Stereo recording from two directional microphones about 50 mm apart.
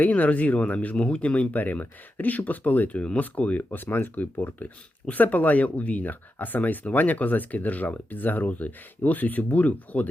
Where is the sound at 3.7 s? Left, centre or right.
Left.